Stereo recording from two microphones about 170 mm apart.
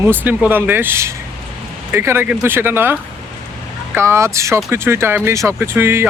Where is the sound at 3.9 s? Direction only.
15° right (ahead or behind).